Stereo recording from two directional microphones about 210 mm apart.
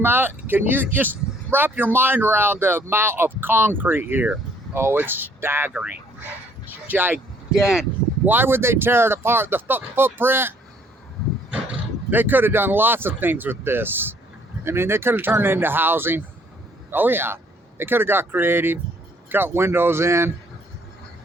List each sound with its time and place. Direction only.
0.0 s speech: 10° right (ahead or behind)
11.5 s a man's voice: 5° right (ahead or behind)